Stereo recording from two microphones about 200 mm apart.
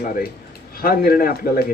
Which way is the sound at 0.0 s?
50° left (ahead or behind).